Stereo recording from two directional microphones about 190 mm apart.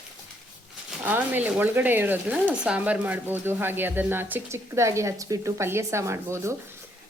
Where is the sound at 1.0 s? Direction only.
10° right (ahead or behind).